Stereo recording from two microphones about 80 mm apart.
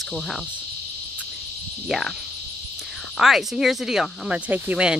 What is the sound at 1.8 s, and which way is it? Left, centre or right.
Cricket, centre.